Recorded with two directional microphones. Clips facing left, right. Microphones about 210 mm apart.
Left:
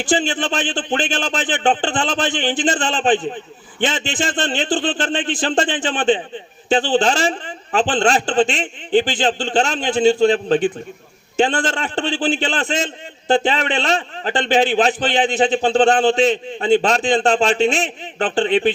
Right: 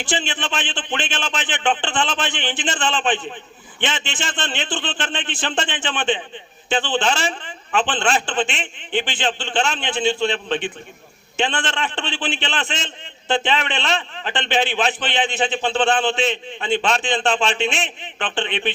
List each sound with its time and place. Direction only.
0.0 s a man's voice: 40° left (ahead or behind)